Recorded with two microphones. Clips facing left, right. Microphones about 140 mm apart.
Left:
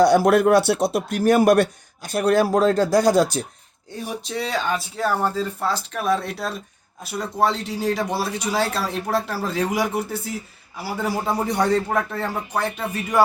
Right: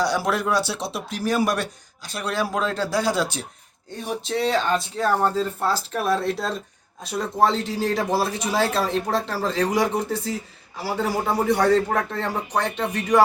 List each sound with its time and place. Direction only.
0.0 s speech: 50° left (ahead or behind)
4.0 s speech: centre (ahead or behind)